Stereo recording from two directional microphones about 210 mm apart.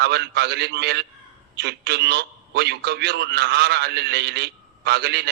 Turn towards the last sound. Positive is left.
turn(degrees=-50)  # may be behind; listen again after turning